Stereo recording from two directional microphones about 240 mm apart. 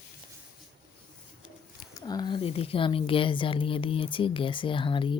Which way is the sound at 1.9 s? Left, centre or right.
Centre.